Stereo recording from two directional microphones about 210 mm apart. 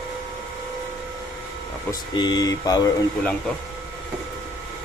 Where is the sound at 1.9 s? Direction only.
20° left (ahead or behind).